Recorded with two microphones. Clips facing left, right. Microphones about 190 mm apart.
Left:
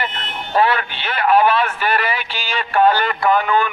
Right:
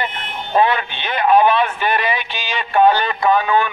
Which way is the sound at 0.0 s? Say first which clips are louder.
Right 1 dB; 15° right (ahead or behind).